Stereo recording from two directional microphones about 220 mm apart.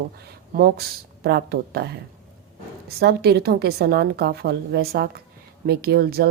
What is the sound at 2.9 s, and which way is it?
A woman's voice, 45° right (ahead or behind).